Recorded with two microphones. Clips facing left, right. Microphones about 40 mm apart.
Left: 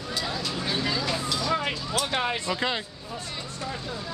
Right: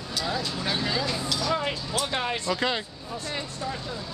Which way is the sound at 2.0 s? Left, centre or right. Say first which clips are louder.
Left 1 dB; centre.